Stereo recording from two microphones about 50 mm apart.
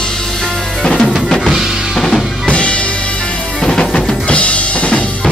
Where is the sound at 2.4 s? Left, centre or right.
Left.